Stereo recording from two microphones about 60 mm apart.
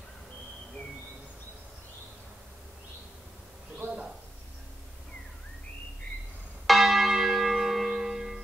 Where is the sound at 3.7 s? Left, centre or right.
Right.